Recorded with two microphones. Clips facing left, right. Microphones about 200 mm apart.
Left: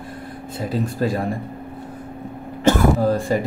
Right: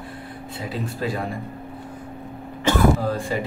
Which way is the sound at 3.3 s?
45° left (ahead or behind).